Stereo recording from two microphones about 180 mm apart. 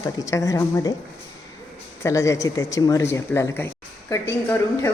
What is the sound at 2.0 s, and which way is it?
A woman's voice, 15° left (ahead or behind).